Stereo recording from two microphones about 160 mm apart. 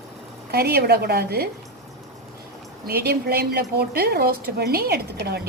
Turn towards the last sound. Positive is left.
turn(degrees=-90)